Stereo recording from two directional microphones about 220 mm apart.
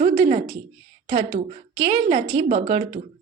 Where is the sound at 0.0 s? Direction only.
30° right (ahead or behind).